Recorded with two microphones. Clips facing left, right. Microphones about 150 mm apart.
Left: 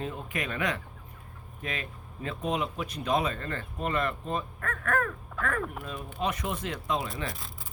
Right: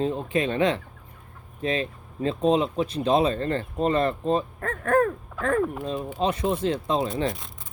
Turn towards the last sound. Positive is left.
turn(degrees=0)  # may be behind; listen again after turning